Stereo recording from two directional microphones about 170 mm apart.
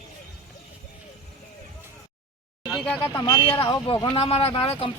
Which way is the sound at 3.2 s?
30° left (ahead or behind).